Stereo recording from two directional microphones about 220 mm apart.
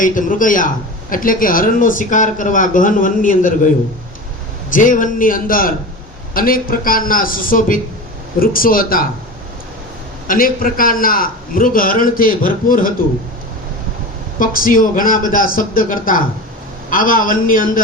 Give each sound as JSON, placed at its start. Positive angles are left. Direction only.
{"t": 0.0, "sound": "a man's voice", "side_deg": 35}
{"t": 4.7, "sound": "a man's voice", "side_deg": 35}
{"t": 10.2, "sound": "a man's voice", "side_deg": 40}
{"t": 14.3, "sound": "a man's voice", "side_deg": 40}